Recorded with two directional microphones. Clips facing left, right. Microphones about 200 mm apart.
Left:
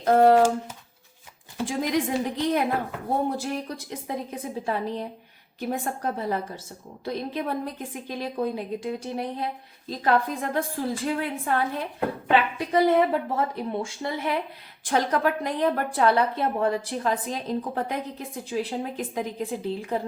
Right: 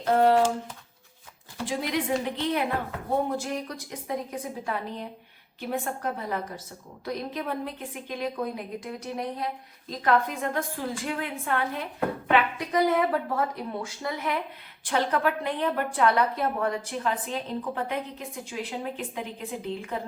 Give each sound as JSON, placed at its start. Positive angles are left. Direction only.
{"t": 0.0, "sound": "a woman's voice", "side_deg": 45}
{"t": 1.6, "sound": "a woman's voice", "side_deg": 45}